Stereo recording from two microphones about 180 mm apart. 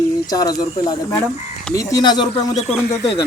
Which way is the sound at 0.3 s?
20° left (ahead or behind).